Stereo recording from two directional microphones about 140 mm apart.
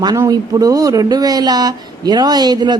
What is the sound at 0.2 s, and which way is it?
Speech, 25° right (ahead or behind).